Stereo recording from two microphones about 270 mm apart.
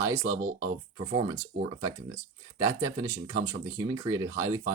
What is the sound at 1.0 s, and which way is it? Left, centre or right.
Speech, right.